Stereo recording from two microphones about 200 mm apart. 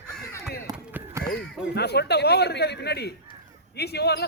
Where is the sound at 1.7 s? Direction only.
55° left (ahead or behind).